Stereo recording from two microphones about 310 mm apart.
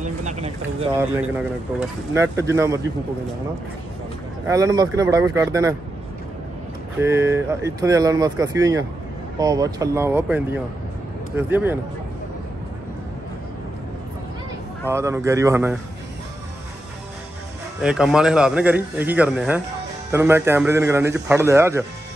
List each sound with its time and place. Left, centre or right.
0.2 s a sound: right
1.8 s speech: centre
4.5 s speech: centre
7.0 s speech: centre
14.9 s speech: centre
17.8 s speech: centre